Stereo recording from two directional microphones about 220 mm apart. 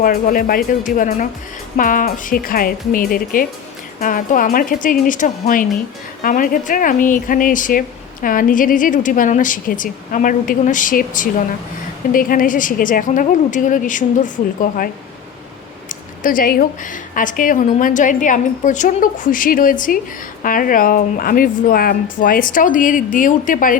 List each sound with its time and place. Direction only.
0.0 s speech: 40° left (ahead or behind)
15.9 s a woman's voice: 40° left (ahead or behind)